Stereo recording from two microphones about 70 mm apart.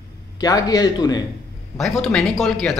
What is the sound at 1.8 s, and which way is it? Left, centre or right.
Speech, centre.